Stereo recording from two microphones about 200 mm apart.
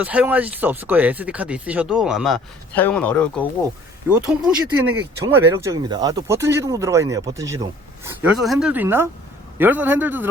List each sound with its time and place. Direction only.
0.0 s speech: 5° right (ahead or behind)
4.3 s speech: 5° right (ahead or behind)